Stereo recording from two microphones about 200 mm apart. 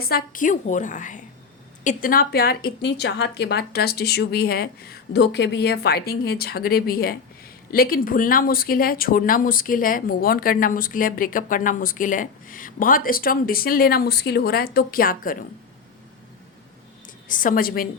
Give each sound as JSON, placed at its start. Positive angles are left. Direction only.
{"t": 0.0, "sound": "a woman's voice", "side_deg": 50}
{"t": 17.2, "sound": "speech", "side_deg": 40}